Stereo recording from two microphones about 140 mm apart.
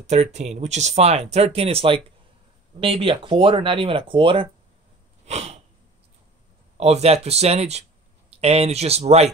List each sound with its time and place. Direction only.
0.0 s speech: 55° right (ahead or behind)
5.2 s a sound: 50° right (ahead or behind)
6.8 s speech: 50° right (ahead or behind)